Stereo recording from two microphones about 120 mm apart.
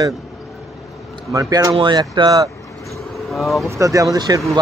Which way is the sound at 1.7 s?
40° right (ahead or behind).